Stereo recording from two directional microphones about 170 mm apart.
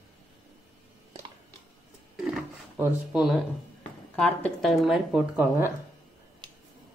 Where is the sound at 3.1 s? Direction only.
Centre (ahead or behind).